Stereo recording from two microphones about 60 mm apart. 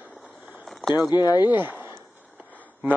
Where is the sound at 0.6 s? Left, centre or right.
Centre.